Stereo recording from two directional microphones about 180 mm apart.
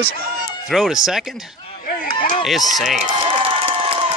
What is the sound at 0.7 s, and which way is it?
Speech, centre (ahead or behind).